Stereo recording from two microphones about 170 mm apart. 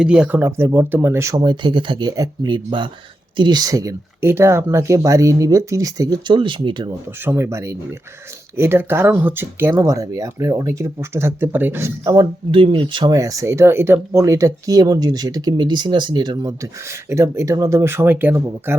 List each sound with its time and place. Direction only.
0.0 s speech: 5° right (ahead or behind); by 6.9 s 30° right (ahead or behind)
7.3 s speech: 15° right (ahead or behind)